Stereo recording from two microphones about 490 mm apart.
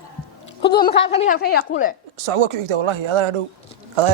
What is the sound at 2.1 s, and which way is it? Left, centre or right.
Speech, right.